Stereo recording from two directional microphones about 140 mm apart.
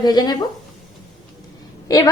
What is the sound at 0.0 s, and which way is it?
Speech, 30° left (ahead or behind).